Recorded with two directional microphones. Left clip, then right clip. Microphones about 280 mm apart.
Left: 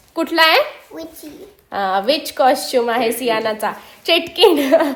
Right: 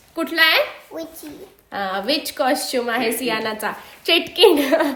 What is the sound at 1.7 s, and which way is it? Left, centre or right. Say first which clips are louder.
A woman's voice: left 5 dB; centre.